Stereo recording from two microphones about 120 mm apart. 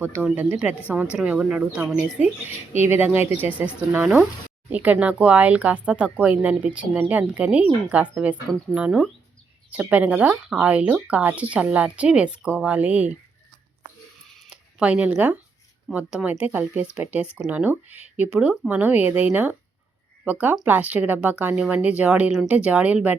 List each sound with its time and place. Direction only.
0.0 s speech: 10° right (ahead or behind)
14.5 s speech: 10° right (ahead or behind)